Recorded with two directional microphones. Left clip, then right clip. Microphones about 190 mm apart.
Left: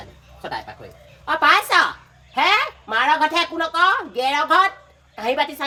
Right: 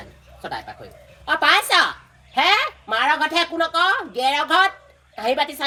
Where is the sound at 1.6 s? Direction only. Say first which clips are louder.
Even; 30° left (ahead or behind).